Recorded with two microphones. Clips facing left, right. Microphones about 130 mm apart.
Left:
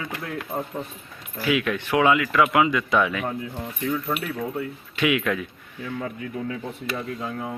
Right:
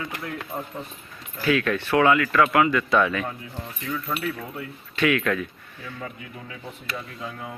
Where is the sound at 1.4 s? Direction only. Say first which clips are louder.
Right 1 dB; 15° left (ahead or behind).